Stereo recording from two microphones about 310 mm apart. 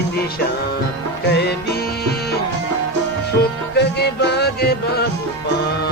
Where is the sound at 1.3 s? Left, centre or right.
Left.